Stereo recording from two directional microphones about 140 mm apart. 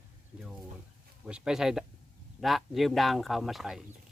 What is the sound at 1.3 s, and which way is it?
Speech, 5° right (ahead or behind).